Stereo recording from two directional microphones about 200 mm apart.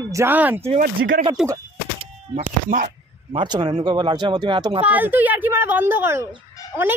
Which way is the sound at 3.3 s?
20° right (ahead or behind).